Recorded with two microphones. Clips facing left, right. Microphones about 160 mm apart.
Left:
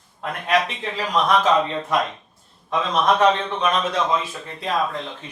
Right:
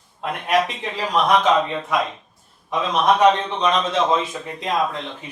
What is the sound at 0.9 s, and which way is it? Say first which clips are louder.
A man's voice: right 1 dB; 10° right (ahead or behind).